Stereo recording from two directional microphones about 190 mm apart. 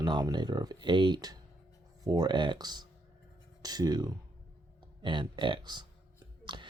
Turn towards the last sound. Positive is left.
turn(degrees=-25)  # may be behind; listen again after turning